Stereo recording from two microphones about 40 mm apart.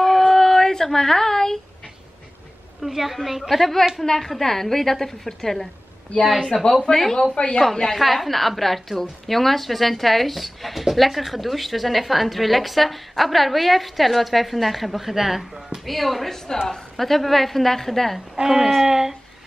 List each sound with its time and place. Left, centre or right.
0.0 s a sound: centre
2.8 s a woman's voice: centre
6.9 s a woman's voice: centre
7.6 s a woman's voice: centre
15.8 s speech: centre
18.3 s speech: centre